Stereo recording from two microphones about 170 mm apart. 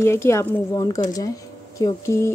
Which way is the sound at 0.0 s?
15° left (ahead or behind).